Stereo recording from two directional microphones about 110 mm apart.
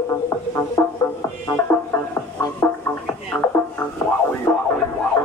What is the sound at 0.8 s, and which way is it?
Music, 20° left (ahead or behind).